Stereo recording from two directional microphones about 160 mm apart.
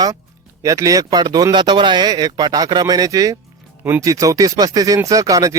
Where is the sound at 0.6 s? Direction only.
20° right (ahead or behind).